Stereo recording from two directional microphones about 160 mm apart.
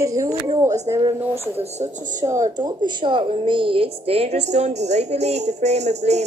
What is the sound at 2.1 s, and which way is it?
A woman's voice, 20° right (ahead or behind).